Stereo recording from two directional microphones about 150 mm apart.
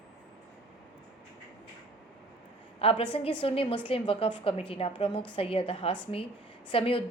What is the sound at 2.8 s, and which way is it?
A woman's voice, 40° left (ahead or behind).